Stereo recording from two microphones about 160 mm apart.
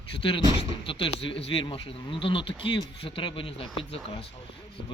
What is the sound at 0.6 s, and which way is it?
Speech, 35° left (ahead or behind).